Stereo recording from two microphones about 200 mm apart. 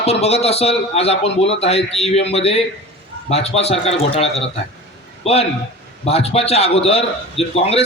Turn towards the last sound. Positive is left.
turn(degrees=30)  # may be behind; listen again after turning